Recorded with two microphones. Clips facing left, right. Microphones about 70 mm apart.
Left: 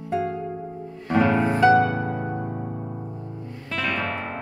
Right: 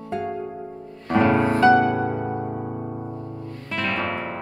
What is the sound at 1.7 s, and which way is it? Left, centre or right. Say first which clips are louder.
Music: right 1 dB; centre.